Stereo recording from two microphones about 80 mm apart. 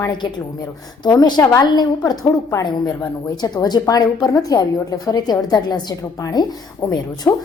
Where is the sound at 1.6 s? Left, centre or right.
Left.